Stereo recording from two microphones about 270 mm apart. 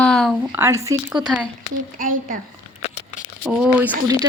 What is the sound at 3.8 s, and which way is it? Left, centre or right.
Speech, centre.